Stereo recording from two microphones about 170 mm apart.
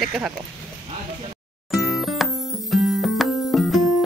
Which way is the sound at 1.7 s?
Centre (ahead or behind).